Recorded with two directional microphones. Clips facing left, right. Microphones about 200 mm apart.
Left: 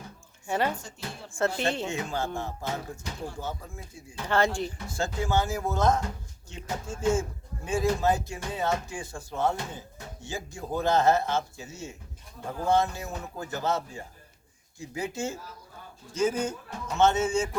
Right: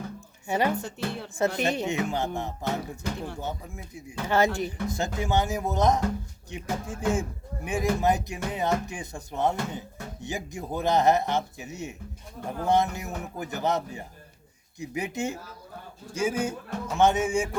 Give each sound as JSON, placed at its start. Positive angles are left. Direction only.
{"t": 0.4, "sound": "speech", "side_deg": -15}
{"t": 0.8, "sound": "speech", "side_deg": -65}
{"t": 1.3, "sound": "speech", "side_deg": -20}